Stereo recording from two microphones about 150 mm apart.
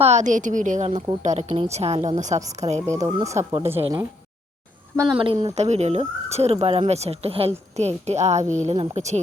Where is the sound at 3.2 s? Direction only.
20° right (ahead or behind).